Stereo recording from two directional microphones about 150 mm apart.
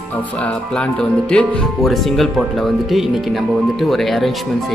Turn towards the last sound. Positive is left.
turn(degrees=0)  # may be behind; listen again after turning